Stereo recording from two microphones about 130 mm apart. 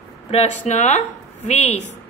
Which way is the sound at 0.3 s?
55° left (ahead or behind).